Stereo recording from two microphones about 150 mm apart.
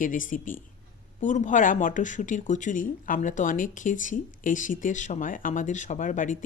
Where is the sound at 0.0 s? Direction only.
60° left (ahead or behind).